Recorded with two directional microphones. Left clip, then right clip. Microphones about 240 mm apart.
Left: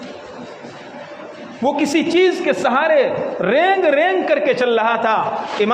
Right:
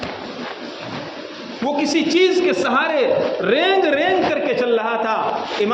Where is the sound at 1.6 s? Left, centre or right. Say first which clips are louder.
Left 2 dB; left.